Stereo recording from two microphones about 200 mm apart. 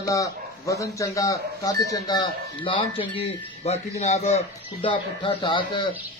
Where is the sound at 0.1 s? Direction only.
15° left (ahead or behind).